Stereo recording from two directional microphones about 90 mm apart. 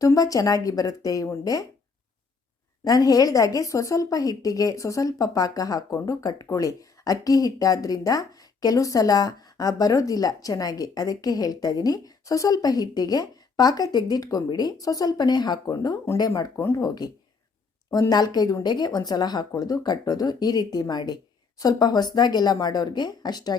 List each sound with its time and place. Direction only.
0.0 s a woman's voice: 40° left (ahead or behind)
2.8 s speech: 45° left (ahead or behind)
16.6 s speech: 30° left (ahead or behind)
16.8 s speech: 45° left (ahead or behind)
18.1 s speech: 50° left (ahead or behind)